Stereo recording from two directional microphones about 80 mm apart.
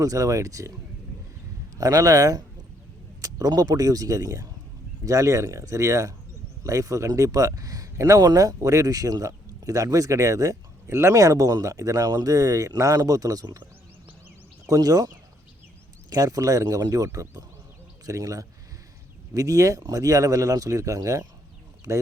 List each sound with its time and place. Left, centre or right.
0.0 s speech: right
1.8 s speech: right
14.7 s speech: right